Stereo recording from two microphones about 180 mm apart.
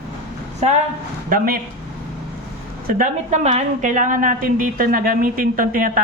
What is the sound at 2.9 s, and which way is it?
A woman's voice, 40° right (ahead or behind).